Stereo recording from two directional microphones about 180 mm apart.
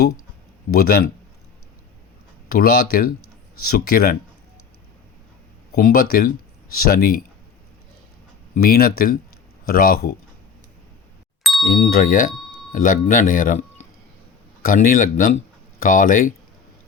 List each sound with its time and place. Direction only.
0.7 s speech: 55° left (ahead or behind)
2.5 s speech: 55° left (ahead or behind)
5.8 s speech: 55° left (ahead or behind)
8.5 s speech: 55° left (ahead or behind)
11.7 s speech: 50° left (ahead or behind)